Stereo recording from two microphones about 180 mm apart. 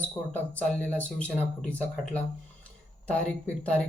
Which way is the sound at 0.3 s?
10° left (ahead or behind).